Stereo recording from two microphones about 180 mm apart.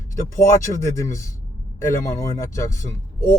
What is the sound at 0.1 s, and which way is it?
Speech, 15° left (ahead or behind).